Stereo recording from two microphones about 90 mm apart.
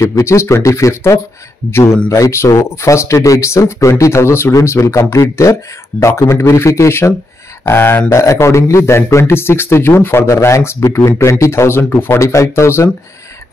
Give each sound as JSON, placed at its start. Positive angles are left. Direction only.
{"t": 0.0, "sound": "a man's voice", "side_deg": 35}